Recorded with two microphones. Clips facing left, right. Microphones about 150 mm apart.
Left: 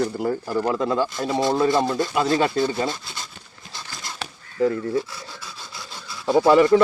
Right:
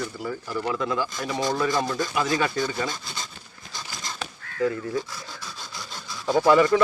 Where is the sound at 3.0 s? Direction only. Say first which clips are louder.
Even; 5° left (ahead or behind).